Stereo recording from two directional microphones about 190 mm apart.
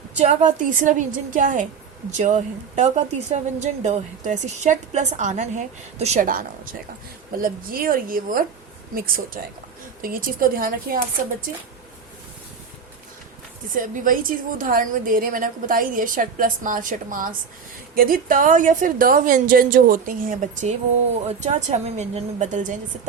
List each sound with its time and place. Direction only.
0.2 s a woman's voice: 40° right (ahead or behind)
13.7 s a woman's voice: 45° right (ahead or behind)